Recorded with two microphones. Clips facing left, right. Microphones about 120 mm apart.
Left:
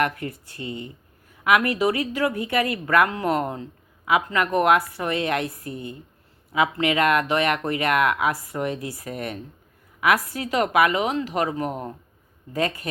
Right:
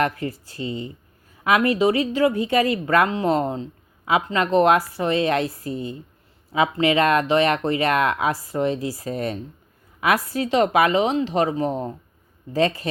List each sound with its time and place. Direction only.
0.0 s a woman's voice: 25° right (ahead or behind)